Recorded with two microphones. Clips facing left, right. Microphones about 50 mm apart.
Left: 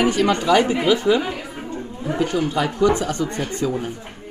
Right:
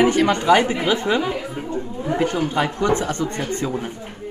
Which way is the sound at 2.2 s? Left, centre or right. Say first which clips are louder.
Left 1 dB; right.